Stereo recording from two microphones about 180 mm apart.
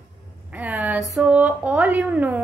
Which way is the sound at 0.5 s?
10° right (ahead or behind).